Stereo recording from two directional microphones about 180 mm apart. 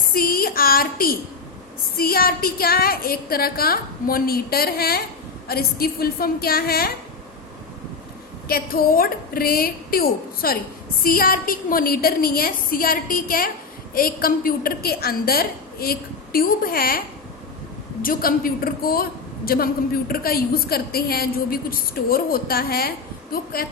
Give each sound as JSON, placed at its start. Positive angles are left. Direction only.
{"t": 0.1, "sound": "a woman's voice", "side_deg": 55}
{"t": 8.4, "sound": "a woman's voice", "side_deg": 55}
{"t": 18.0, "sound": "a woman's voice", "side_deg": 50}